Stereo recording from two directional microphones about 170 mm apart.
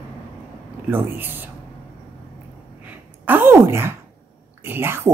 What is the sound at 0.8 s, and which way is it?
Speech, 10° right (ahead or behind).